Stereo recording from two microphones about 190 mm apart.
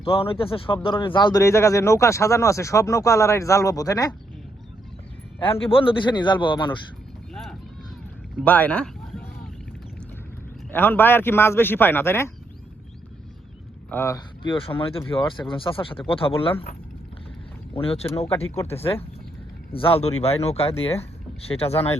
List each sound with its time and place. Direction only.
0.0 s speech: 30° left (ahead or behind)
5.4 s speech: 30° left (ahead or behind)
8.4 s a sound: 10° left (ahead or behind)
10.7 s speech: 10° left (ahead or behind)
13.9 s speech: 15° left (ahead or behind)
14.4 s speech: 25° left (ahead or behind)
17.7 s speech: 30° left (ahead or behind)
18.6 s speech: 10° left (ahead or behind)
19.7 s speech: 30° left (ahead or behind)